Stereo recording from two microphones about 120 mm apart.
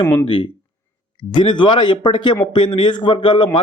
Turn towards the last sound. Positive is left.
turn(degrees=45)  # may be behind; listen again after turning